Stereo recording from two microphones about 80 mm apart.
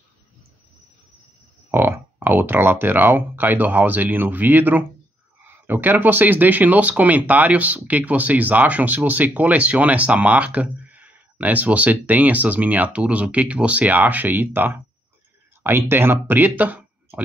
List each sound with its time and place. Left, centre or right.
1.7 s speech: right